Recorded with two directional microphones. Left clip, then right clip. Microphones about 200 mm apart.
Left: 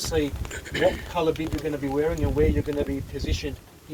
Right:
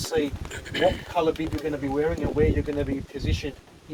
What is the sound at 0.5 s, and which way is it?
Speech, 30° right (ahead or behind).